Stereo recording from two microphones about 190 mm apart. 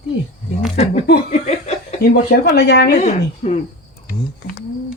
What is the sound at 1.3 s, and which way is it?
Laughter, 35° left (ahead or behind).